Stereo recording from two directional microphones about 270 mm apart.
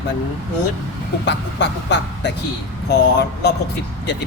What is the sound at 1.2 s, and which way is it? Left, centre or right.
Speech, left.